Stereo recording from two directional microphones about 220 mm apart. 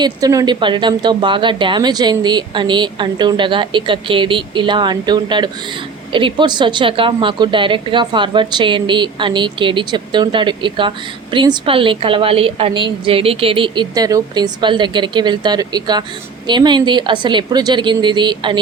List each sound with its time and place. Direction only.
0.0 s a woman's voice: 15° right (ahead or behind)